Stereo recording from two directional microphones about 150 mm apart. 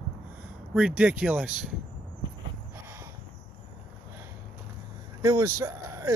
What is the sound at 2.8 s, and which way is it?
Owl, 15° right (ahead or behind).